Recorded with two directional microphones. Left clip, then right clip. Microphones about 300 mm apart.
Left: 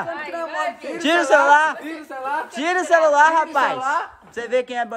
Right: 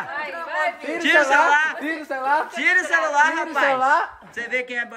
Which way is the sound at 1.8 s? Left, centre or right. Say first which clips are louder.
Right 4 dB; right.